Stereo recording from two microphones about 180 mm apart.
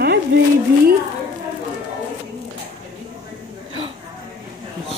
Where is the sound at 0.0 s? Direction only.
65° right (ahead or behind).